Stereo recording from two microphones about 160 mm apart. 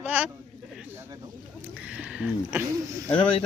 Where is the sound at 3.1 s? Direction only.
30° left (ahead or behind).